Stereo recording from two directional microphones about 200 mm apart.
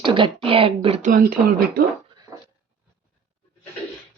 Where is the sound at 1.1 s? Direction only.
45° right (ahead or behind).